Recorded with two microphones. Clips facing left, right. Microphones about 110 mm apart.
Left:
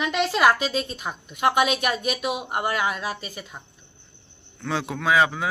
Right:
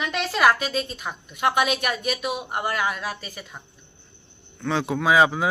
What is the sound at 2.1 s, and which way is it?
Speech, 15° left (ahead or behind).